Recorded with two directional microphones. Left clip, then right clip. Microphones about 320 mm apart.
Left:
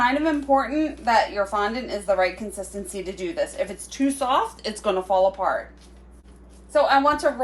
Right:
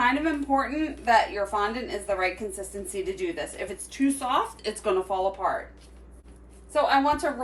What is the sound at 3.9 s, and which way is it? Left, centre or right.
A woman's voice, centre.